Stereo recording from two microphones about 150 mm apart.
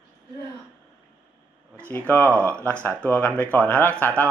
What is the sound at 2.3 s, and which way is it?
Speech, 20° right (ahead or behind).